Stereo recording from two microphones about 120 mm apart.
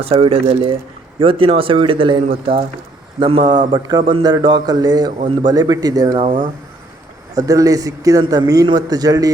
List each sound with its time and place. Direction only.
0.0 s a man's voice: 55° right (ahead or behind); by 6.1 s 35° right (ahead or behind)
7.3 s a man's voice: 30° right (ahead or behind)